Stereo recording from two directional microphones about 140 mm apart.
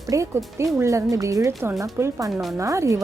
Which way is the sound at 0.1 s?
25° right (ahead or behind).